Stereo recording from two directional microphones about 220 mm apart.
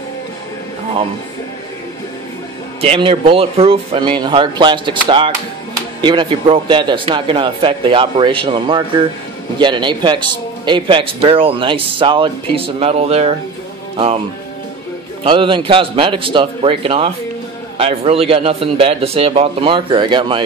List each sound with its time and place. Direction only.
2.8 s a man's voice: 25° right (ahead or behind)
15.2 s a man's voice: 20° right (ahead or behind)